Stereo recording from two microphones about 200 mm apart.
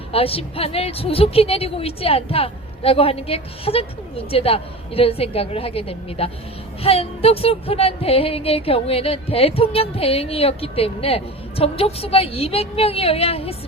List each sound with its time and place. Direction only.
0.1 s speech: 30° left (ahead or behind)